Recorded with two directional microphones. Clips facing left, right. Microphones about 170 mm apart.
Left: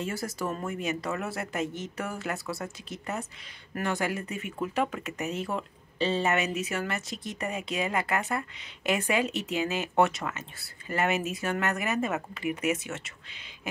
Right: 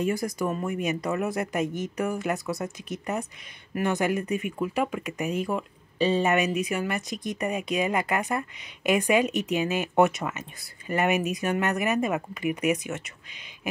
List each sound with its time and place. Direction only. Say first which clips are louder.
0.0 s speech: right 6 dB; 15° right (ahead or behind)